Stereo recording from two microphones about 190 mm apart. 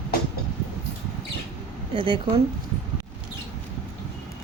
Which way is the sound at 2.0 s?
25° right (ahead or behind).